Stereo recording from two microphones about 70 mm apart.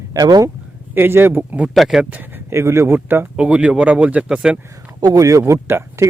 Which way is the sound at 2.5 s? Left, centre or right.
Right.